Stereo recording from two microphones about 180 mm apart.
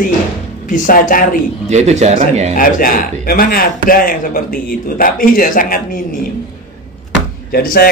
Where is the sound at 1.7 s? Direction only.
40° right (ahead or behind).